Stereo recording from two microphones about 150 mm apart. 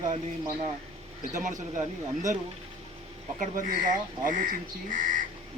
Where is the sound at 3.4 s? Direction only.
60° right (ahead or behind).